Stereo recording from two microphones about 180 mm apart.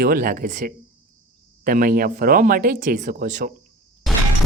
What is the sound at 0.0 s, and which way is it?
Speech, 55° right (ahead or behind).